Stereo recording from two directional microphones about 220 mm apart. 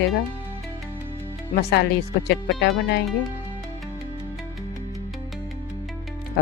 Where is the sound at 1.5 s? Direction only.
50° left (ahead or behind).